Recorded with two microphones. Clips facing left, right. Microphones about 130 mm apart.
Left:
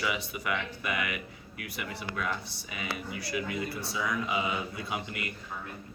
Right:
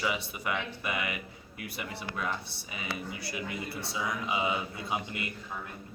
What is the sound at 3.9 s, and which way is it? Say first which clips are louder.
Speech: left 1 dB; 25° right (ahead or behind).